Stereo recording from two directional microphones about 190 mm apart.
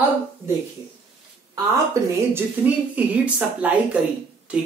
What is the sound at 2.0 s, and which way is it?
A woman's voice, 15° right (ahead or behind).